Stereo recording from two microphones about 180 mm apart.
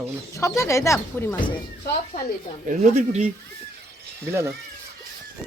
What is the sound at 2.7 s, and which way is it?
Speech, 40° right (ahead or behind).